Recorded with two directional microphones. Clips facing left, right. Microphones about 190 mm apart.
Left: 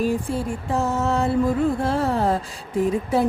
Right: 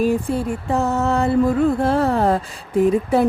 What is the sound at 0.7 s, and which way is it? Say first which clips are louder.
Music: right 3 dB; 60° right (ahead or behind).